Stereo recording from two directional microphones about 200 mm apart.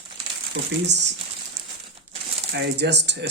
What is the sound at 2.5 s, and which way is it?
Speech, 60° right (ahead or behind).